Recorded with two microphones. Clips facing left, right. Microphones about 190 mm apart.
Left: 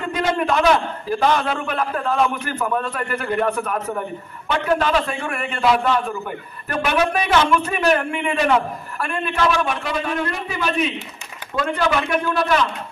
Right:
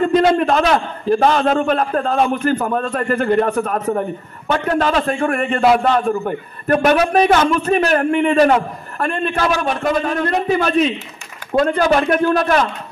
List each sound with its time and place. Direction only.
0.0 s a man's voice: 45° right (ahead or behind)
3.0 s a man's voice: 35° right (ahead or behind)
3.7 s a man's voice: 50° right (ahead or behind)